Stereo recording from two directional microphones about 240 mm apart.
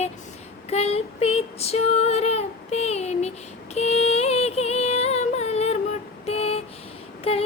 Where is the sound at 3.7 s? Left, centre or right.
Left.